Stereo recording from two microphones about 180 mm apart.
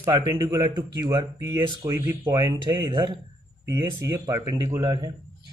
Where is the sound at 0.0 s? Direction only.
20° right (ahead or behind).